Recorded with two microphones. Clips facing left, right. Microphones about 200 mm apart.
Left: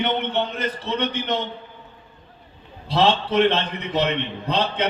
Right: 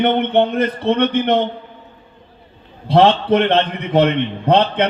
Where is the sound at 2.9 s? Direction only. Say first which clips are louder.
Right 7 dB; 55° right (ahead or behind).